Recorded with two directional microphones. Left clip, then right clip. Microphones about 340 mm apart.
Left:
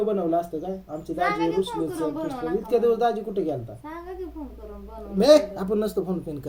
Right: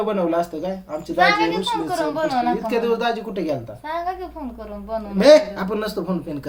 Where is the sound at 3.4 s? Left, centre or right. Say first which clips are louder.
Right 4 dB; centre.